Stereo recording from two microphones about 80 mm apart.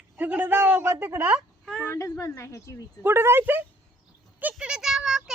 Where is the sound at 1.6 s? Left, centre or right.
Centre.